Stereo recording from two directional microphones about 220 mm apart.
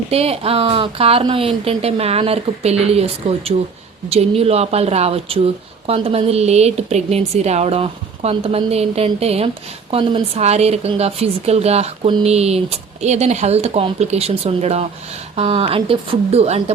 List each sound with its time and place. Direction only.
0.1 s speech: 25° right (ahead or behind)